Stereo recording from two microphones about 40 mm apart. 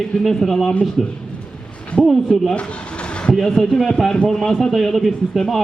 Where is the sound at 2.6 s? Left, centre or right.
Left.